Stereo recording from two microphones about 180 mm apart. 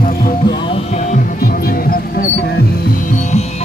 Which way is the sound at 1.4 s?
55° left (ahead or behind).